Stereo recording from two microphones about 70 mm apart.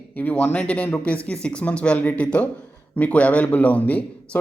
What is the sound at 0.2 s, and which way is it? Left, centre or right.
A man's voice, left.